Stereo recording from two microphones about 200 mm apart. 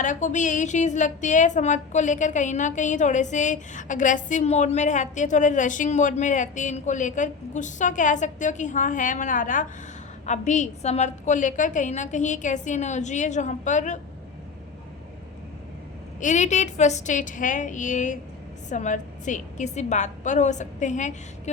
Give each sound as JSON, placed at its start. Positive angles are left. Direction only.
{"t": 0.0, "sound": "a woman's voice", "side_deg": 40}
{"t": 16.2, "sound": "a woman's voice", "side_deg": 35}